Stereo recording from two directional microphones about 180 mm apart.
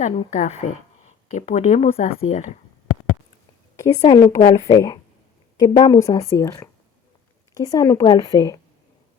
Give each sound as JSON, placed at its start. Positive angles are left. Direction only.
{"t": 0.0, "sound": "speech", "side_deg": 40}
{"t": 4.0, "sound": "a woman's voice", "side_deg": 25}